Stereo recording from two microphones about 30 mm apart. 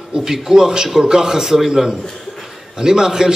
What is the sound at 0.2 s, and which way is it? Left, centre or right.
A man's voice, centre.